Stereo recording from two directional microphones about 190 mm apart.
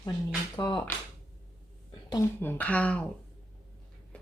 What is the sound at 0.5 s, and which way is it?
Speech, 20° left (ahead or behind).